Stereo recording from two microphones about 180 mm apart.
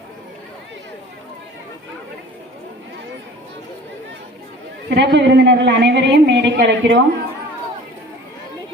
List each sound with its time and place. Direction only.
4.9 s a woman's voice: 65° right (ahead or behind)